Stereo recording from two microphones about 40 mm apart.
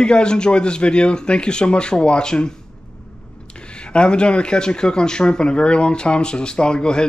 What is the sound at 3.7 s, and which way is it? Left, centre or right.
Speech, left.